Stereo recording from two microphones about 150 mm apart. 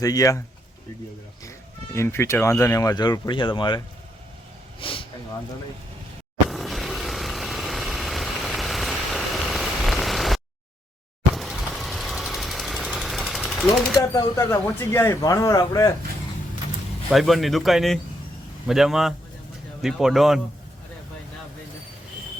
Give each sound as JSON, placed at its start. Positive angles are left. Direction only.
{"t": 0.0, "sound": "speech", "side_deg": 25}
{"t": 1.5, "sound": "speech", "side_deg": 15}
{"t": 6.5, "sound": "vehicle", "side_deg": 0}
{"t": 11.3, "sound": "jackhammer", "side_deg": 0}
{"t": 14.1, "sound": "speech", "side_deg": 20}
{"t": 17.1, "sound": "a man's voice", "side_deg": 0}